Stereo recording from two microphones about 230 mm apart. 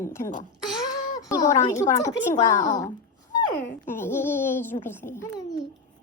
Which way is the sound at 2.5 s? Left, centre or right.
Left.